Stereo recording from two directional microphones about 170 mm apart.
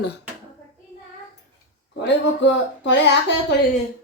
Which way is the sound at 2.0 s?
90° left.